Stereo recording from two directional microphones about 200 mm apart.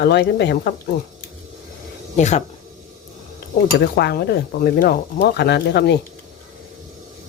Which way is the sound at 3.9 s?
55° left (ahead or behind).